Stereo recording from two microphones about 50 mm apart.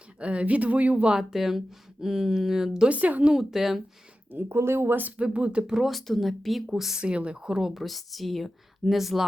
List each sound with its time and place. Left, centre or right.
0.2 s speech: right
1.2 s speech: centre
2.9 s speech: right
3.3 s speech: centre
4.3 s speech: right
4.9 s speech: right
5.2 s speech: right
5.7 s speech: centre
7.0 s speech: right
7.7 s speech: centre